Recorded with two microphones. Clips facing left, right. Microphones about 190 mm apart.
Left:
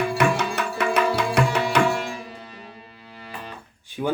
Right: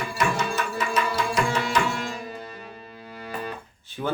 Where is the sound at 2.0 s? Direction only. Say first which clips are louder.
Right 1 dB; 45° right (ahead or behind).